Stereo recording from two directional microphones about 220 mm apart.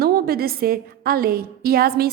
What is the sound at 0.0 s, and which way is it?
A woman's voice, 45° right (ahead or behind).